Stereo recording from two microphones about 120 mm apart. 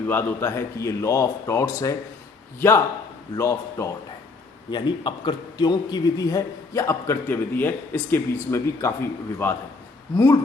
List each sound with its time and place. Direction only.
0.1 s a man's voice: 20° left (ahead or behind)
4.7 s a man's voice: 40° left (ahead or behind); by 9.6 s 20° left (ahead or behind)